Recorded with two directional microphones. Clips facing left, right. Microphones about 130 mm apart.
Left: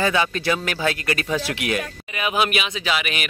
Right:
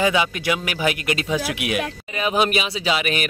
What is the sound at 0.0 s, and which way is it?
Speech, 15° right (ahead or behind).